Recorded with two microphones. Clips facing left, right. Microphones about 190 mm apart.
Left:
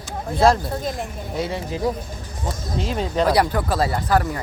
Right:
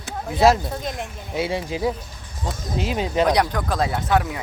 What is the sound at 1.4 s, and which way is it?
Speech, 10° right (ahead or behind).